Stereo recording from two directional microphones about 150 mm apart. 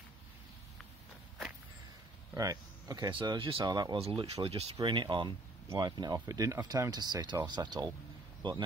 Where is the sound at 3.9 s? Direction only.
40° right (ahead or behind).